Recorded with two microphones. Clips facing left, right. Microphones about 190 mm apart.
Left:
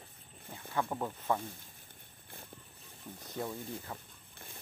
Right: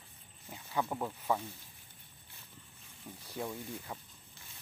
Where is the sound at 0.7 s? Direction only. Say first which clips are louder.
Even; 5° right (ahead or behind).